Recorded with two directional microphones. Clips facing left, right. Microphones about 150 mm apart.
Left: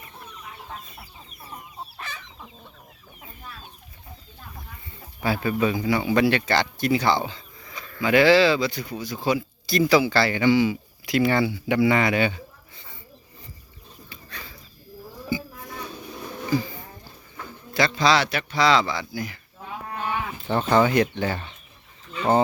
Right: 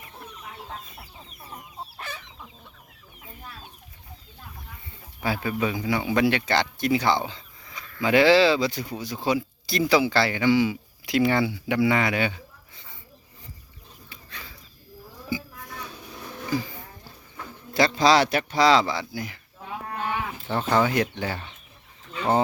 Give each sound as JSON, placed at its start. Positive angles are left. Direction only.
{"t": 5.2, "sound": "speech", "side_deg": -10}
{"t": 5.9, "sound": "speech", "side_deg": 5}
{"t": 6.1, "sound": "speech", "side_deg": -15}
{"t": 11.0, "sound": "speech", "side_deg": -20}
{"t": 17.7, "sound": "speech", "side_deg": -40}
{"t": 20.5, "sound": "speech", "side_deg": -5}